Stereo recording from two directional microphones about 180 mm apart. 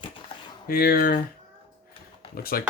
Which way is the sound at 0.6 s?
60° left (ahead or behind).